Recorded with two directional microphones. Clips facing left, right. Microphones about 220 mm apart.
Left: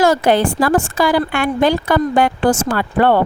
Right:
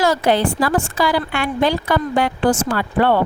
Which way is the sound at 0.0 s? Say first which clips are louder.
Left 3 dB; 50° left (ahead or behind).